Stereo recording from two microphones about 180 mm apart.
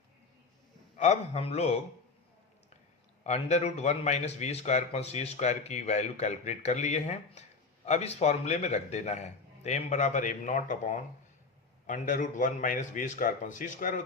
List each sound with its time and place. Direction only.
0.9 s a man's voice: 40° left (ahead or behind)
3.2 s a man's voice: 35° left (ahead or behind)